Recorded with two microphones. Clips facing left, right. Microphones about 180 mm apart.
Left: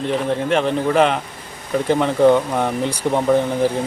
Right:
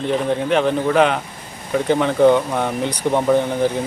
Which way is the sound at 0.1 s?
Centre (ahead or behind).